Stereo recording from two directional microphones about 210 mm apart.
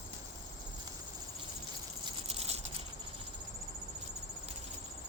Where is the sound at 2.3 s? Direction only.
30° right (ahead or behind).